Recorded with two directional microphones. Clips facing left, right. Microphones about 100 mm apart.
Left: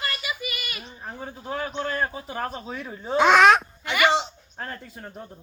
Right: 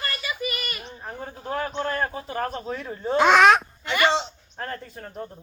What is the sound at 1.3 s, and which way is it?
Speech, 45° right (ahead or behind).